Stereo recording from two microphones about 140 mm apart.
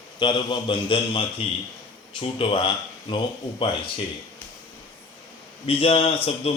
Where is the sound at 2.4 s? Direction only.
35° left (ahead or behind).